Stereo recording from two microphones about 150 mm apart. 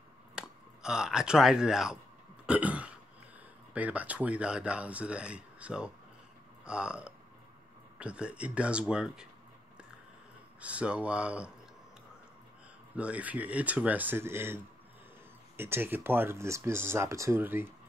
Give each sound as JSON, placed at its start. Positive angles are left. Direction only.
{"t": 0.4, "sound": "speech", "side_deg": -5}
{"t": 2.4, "sound": "throat clearing", "side_deg": -10}
{"t": 3.7, "sound": "speech", "side_deg": -10}
{"t": 10.6, "sound": "speech", "side_deg": -10}
{"t": 12.9, "sound": "speech", "side_deg": -10}